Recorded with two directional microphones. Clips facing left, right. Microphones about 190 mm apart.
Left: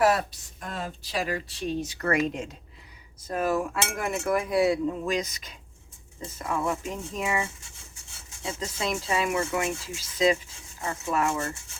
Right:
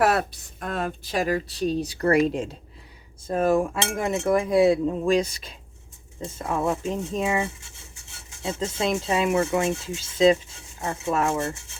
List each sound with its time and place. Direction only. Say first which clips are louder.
0.0 s speech: right 1 dB; 60° right (ahead or behind); by 2.6 s 30° right (ahead or behind)
3.2 s cutlery: right 5 dB; 25° right (ahead or behind)